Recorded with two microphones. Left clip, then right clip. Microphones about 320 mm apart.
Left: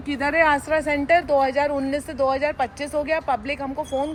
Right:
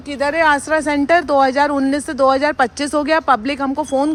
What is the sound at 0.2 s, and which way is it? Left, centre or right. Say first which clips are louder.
Speech: right 5 dB; centre.